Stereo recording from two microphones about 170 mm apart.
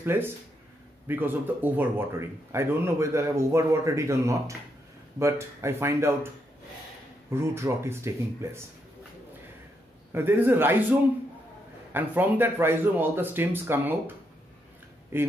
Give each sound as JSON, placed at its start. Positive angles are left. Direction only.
{"t": 0.0, "sound": "speech", "side_deg": -15}
{"t": 7.2, "sound": "speech", "side_deg": -15}
{"t": 10.1, "sound": "speech", "side_deg": -10}